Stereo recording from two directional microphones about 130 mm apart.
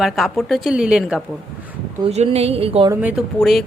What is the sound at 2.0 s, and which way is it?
Speech, 50° right (ahead or behind).